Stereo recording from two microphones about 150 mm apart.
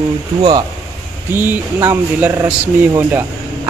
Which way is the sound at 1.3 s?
15° right (ahead or behind).